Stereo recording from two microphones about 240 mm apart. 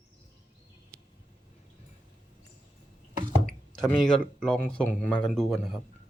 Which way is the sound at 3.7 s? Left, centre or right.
Centre.